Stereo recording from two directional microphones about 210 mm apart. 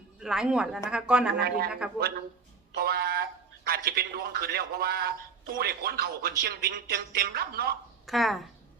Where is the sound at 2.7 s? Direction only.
50° right (ahead or behind).